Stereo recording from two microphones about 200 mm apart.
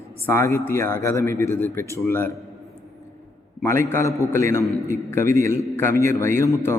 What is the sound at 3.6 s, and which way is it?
A man's voice, 10° left (ahead or behind).